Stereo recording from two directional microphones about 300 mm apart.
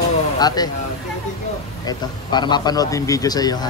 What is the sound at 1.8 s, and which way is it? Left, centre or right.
Speech, centre.